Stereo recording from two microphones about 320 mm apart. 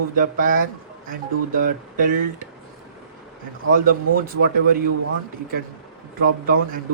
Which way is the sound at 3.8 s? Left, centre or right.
Right.